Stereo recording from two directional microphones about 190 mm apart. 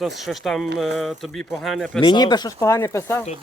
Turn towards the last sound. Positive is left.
turn(degrees=15)  # may be behind; listen again after turning